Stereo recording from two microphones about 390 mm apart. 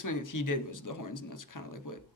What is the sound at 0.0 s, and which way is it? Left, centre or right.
Speech, left.